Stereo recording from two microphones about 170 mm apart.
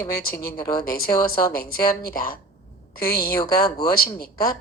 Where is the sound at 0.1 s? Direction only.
60° left (ahead or behind).